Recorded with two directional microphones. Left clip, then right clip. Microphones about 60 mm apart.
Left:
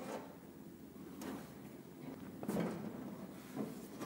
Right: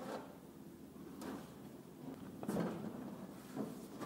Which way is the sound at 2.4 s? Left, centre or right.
Centre.